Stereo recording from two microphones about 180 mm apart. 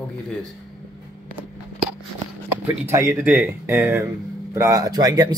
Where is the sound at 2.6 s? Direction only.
15° right (ahead or behind).